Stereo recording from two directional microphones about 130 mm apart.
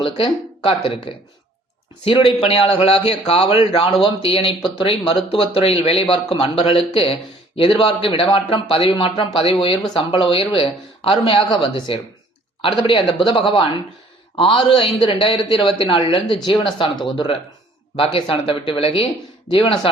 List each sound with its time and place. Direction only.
0.0 s a man's voice: 45° left (ahead or behind)